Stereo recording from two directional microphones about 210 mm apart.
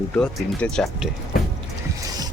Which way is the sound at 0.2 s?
5° left (ahead or behind).